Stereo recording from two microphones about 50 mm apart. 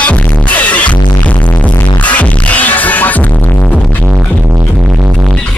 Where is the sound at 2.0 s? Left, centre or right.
Left.